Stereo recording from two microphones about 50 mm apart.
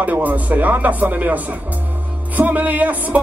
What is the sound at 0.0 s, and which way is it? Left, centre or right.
Speech, right.